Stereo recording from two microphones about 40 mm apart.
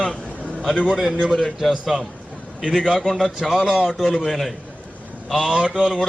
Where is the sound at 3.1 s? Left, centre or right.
Centre.